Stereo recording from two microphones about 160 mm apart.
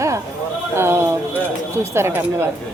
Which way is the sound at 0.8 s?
15° right (ahead or behind).